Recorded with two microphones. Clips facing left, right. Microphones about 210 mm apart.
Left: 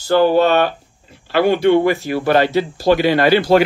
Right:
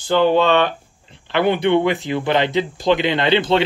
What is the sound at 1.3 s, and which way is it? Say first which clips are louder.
Speech: left 3 dB; 20° right (ahead or behind).